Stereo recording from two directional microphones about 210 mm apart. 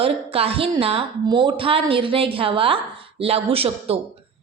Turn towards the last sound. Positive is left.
turn(degrees=-25)  # may be behind; listen again after turning